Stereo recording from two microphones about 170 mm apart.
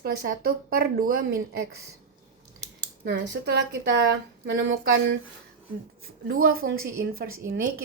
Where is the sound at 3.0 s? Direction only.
75° right (ahead or behind).